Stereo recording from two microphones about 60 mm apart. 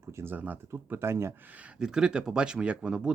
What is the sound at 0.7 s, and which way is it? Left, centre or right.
Speech, right.